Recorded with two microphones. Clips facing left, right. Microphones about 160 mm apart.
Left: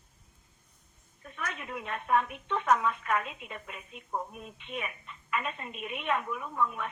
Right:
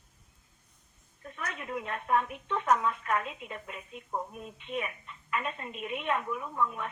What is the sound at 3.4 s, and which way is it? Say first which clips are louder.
Speech: right 2 dB; 25° right (ahead or behind).